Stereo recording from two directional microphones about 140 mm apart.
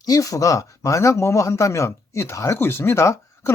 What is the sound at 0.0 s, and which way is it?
Speech, 25° left (ahead or behind).